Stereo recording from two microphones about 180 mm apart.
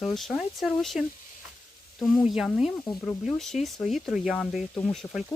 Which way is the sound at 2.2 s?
5° right (ahead or behind).